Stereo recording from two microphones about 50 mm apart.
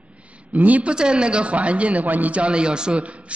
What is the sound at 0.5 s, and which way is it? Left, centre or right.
Speech, right.